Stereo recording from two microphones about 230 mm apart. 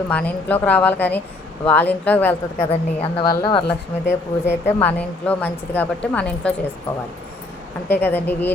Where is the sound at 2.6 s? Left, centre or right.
Left.